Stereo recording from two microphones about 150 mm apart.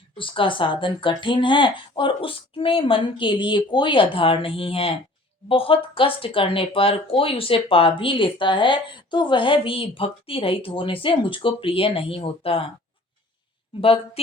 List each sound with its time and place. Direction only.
0.2 s speech: 35° left (ahead or behind)
13.8 s speech: 40° left (ahead or behind)